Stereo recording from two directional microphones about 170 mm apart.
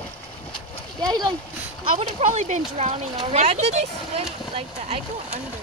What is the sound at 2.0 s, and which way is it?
Speech, 40° right (ahead or behind).